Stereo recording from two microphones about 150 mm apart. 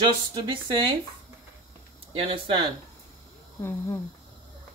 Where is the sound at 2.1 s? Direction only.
35° right (ahead or behind).